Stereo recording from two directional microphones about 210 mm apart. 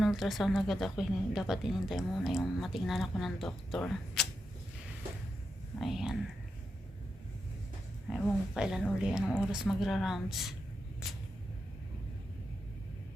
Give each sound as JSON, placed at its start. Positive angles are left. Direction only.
{"t": 0.0, "sound": "speech", "side_deg": 0}
{"t": 5.8, "sound": "speech", "side_deg": 0}
{"t": 8.1, "sound": "speech", "side_deg": 0}